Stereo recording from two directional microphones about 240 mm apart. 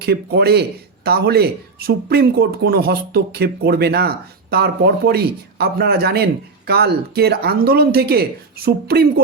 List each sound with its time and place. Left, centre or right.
0.0 s a man's voice: right